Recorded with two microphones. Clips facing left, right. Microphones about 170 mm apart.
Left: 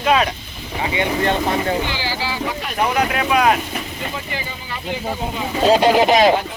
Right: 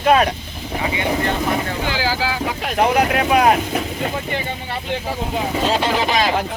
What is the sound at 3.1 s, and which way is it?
Speech, 45° right (ahead or behind).